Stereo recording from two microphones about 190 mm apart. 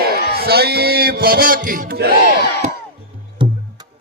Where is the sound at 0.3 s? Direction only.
55° right (ahead or behind).